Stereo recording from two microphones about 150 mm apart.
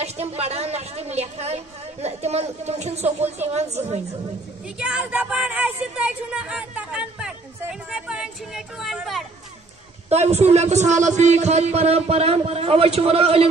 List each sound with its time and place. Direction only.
0.0 s a woman's voice: 45° right (ahead or behind)
4.7 s speech: 5° right (ahead or behind)
10.0 s a woman's voice: 45° right (ahead or behind)